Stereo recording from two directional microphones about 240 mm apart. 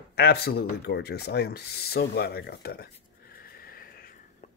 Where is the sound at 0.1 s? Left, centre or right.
Left.